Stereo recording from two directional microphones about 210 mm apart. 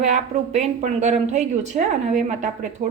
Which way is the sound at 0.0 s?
35° right (ahead or behind).